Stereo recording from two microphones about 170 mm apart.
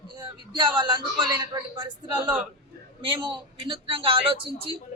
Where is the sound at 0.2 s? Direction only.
25° right (ahead or behind).